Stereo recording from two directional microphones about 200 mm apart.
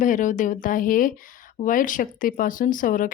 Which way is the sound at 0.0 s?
40° left (ahead or behind).